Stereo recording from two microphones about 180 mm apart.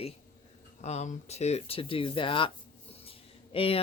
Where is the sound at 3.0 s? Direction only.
30° left (ahead or behind).